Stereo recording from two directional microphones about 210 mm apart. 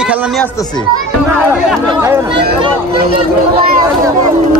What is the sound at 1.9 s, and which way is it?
Speech, 15° right (ahead or behind).